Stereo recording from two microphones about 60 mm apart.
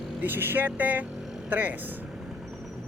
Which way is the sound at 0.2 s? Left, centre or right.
Right.